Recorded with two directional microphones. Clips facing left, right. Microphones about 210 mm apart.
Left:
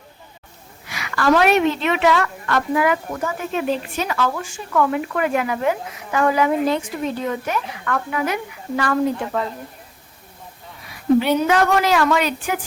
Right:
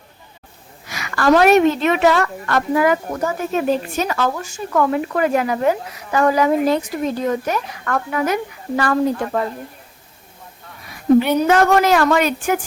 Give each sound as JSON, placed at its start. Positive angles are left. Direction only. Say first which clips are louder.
{"t": 0.9, "sound": "a woman's voice", "louder": "right 2 dB", "side_deg": -45}
{"t": 11.3, "sound": "a woman's voice", "louder": "right 3 dB", "side_deg": -45}